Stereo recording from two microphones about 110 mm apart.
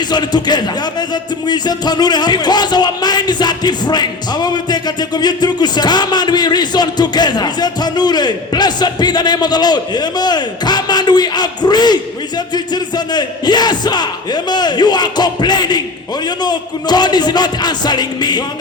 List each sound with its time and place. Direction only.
0.1 s speech: 40° left (ahead or behind)